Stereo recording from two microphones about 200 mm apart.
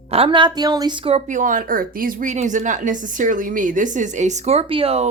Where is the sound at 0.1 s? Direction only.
25° right (ahead or behind).